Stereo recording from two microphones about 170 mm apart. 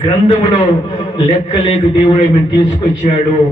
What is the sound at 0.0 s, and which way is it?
A man's voice, 30° left (ahead or behind).